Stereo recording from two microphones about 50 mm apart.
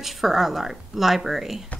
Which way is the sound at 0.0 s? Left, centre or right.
Centre.